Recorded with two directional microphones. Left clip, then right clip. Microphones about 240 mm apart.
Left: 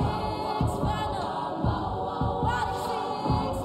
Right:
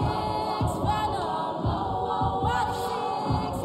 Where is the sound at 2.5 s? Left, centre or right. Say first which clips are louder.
Right 1 dB; centre.